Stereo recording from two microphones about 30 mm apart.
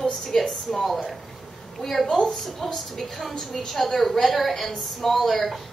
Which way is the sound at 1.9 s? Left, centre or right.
Centre.